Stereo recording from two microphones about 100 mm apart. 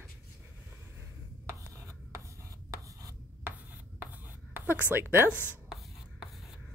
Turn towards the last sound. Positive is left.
turn(degrees=20)  # may be behind; listen again after turning